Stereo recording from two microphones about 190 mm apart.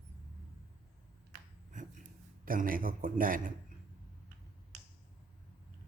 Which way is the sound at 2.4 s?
45° right (ahead or behind).